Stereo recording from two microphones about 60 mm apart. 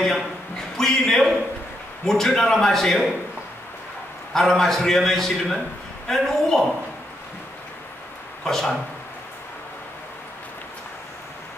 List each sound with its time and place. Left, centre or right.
0.0 s a man's voice: centre
4.3 s a man's voice: centre
8.5 s speech: centre